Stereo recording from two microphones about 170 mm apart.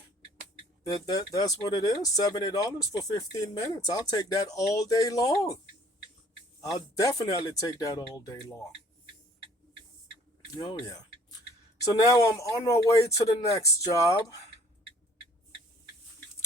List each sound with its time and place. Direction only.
1.0 s speech: 20° left (ahead or behind)
6.7 s speech: 20° left (ahead or behind)
10.5 s speech: 25° left (ahead or behind)